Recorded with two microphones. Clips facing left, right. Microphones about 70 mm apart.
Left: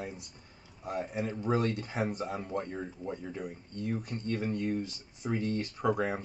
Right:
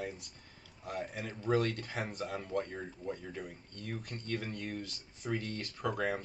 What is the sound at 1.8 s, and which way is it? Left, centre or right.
Speech, centre.